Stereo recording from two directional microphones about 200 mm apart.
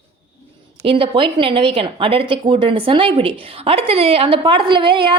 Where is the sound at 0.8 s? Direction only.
25° right (ahead or behind).